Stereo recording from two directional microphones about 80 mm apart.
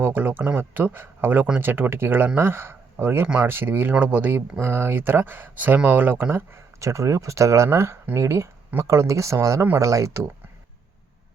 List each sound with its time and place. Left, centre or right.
0.0 s speech: right
6.7 s speech: right
7.8 s speech: right
9.6 s speech: right
9.8 s speech: right